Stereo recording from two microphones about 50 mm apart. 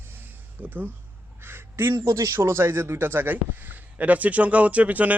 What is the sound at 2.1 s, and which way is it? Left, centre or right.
Speech, right.